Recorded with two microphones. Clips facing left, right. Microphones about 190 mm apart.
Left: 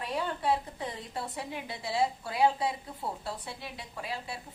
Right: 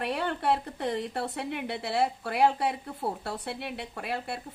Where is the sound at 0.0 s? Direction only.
65° right (ahead or behind).